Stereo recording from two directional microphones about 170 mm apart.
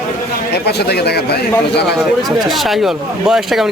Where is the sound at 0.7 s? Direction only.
70° left (ahead or behind).